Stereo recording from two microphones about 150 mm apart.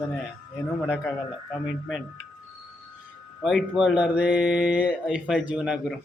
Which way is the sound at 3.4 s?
Centre (ahead or behind).